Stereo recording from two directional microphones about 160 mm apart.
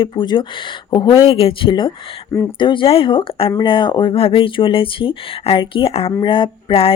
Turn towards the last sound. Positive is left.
turn(degrees=35)  # may be behind; listen again after turning